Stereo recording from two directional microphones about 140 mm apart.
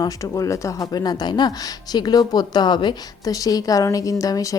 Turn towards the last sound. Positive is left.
turn(degrees=25)  # may be behind; listen again after turning